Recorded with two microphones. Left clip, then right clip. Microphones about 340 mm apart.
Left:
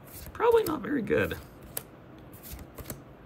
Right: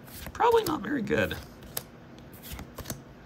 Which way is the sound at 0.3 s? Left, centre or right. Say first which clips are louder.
Even; centre.